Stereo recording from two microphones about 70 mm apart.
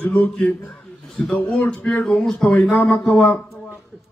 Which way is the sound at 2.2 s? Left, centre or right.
Centre.